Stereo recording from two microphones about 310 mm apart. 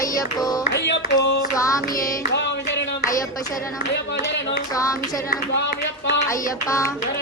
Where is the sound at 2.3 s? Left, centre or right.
Left.